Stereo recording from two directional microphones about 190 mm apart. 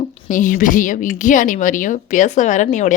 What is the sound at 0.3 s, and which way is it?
A woman's voice, 45° left (ahead or behind).